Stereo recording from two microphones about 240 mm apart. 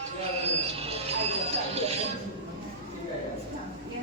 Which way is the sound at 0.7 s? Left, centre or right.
Right.